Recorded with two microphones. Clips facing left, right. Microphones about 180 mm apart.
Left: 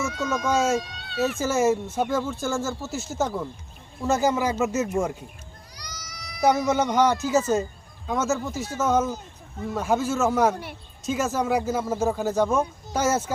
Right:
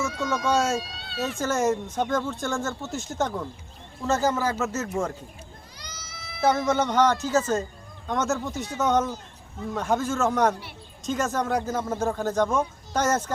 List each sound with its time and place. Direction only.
0.0 s speech: 5° left (ahead or behind)
5.7 s a sound: 25° right (ahead or behind)
6.4 s speech: 10° left (ahead or behind)